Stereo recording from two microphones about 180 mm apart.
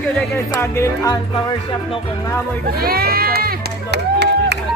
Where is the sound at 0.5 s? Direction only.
15° left (ahead or behind).